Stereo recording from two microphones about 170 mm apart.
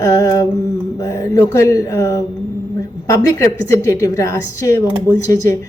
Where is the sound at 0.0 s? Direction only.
20° left (ahead or behind).